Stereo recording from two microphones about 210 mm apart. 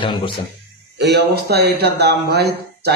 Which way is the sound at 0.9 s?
50° right (ahead or behind).